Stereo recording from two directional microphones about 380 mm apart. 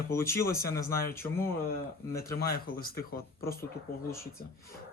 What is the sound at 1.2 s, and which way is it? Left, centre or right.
Speech, centre.